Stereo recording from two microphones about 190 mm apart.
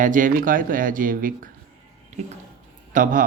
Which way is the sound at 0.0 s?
45° right (ahead or behind).